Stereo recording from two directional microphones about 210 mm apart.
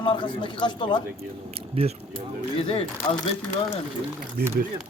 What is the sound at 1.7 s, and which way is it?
Speech, 30° right (ahead or behind).